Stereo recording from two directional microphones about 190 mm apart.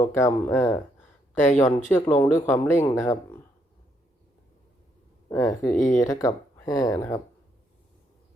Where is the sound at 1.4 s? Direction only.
40° left (ahead or behind).